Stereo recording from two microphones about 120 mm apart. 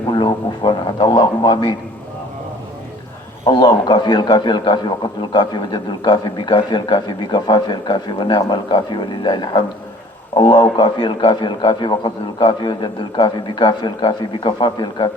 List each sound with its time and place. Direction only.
0.1 s a man's voice: 45° left (ahead or behind)
3.4 s a man's voice: 40° left (ahead or behind)